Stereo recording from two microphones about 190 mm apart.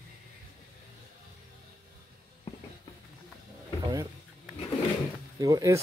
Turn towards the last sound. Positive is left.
turn(degrees=-20)  # may be behind; listen again after turning